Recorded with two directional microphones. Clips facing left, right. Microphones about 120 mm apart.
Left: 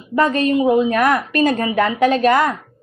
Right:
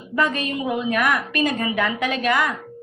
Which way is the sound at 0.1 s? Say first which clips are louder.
Left 7 dB; 35° left (ahead or behind).